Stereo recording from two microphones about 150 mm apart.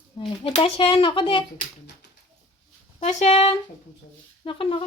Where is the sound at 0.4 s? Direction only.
40° left (ahead or behind).